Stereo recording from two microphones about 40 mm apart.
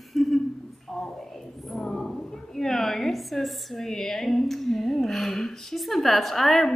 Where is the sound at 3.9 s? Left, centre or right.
Centre.